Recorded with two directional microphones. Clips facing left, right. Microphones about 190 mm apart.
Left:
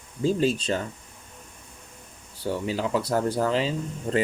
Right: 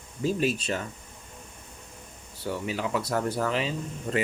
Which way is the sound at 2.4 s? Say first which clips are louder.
Left 3 dB; 30° left (ahead or behind).